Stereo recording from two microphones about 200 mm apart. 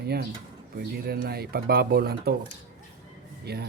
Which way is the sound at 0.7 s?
50° right (ahead or behind).